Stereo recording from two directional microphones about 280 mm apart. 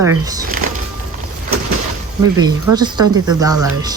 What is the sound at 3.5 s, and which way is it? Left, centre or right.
Speech, right.